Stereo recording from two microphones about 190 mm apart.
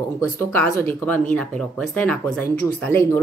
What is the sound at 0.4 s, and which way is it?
Speech, 10° left (ahead or behind).